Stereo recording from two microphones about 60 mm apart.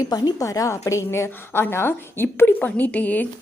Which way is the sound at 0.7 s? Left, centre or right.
Left.